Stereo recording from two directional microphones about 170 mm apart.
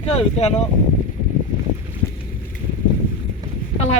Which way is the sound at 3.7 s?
40° left (ahead or behind).